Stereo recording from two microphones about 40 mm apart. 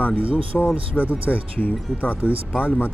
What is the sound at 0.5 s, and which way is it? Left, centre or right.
Speech, centre.